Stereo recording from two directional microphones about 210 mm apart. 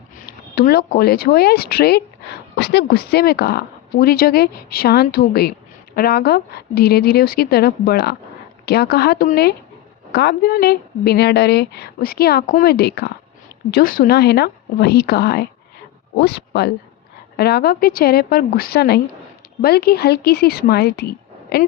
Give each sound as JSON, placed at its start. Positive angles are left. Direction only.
{"t": 0.5, "sound": "speech", "side_deg": 45}